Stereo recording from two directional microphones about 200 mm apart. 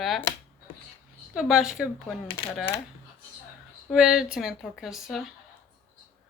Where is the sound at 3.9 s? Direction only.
Centre (ahead or behind).